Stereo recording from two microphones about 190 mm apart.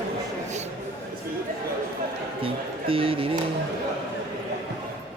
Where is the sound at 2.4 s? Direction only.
30° right (ahead or behind).